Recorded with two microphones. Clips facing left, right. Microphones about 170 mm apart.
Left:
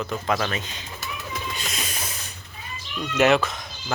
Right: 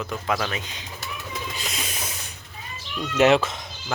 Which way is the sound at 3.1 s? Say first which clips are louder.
Right 1 dB; 25° right (ahead or behind).